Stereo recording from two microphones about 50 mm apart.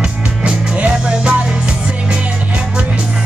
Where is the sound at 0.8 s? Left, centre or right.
Right.